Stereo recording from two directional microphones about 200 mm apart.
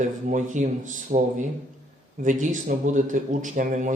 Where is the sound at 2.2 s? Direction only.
40° right (ahead or behind).